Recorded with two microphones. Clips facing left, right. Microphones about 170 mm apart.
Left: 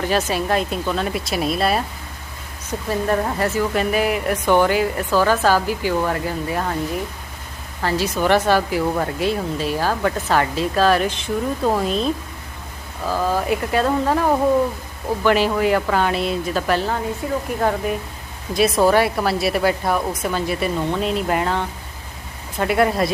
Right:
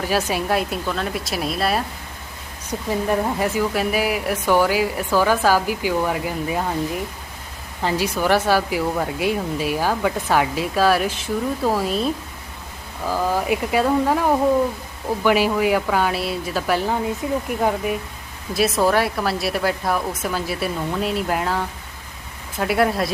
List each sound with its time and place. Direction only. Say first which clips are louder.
0.0 s speech: left 1 dB; 10° right (ahead or behind)
2.6 s speech: left 1 dB; 15° right (ahead or behind)
7.8 s speech: left 1 dB; 15° right (ahead or behind)
13.1 s speech: left 1 dB; 10° right (ahead or behind)
17.6 s speech: left 2 dB; 5° right (ahead or behind)